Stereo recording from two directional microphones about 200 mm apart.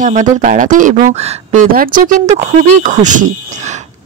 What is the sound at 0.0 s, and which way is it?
Speech, 40° right (ahead or behind).